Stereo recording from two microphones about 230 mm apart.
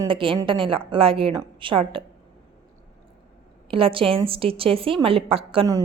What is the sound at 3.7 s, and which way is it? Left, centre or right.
A woman's voice, right.